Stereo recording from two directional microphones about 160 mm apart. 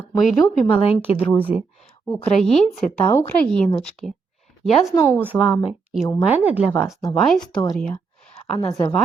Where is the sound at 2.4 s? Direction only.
Centre (ahead or behind).